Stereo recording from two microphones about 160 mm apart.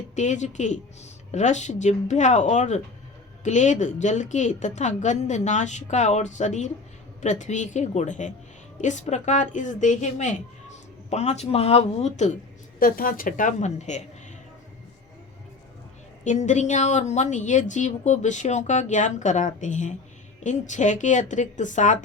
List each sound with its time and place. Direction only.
0.2 s a woman's voice: 50° left (ahead or behind)
12.8 s a woman's voice: 60° left (ahead or behind); by 14.0 s 45° left (ahead or behind)
16.2 s a woman's voice: 50° left (ahead or behind)